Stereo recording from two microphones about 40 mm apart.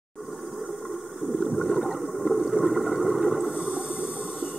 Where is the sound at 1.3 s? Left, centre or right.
Centre.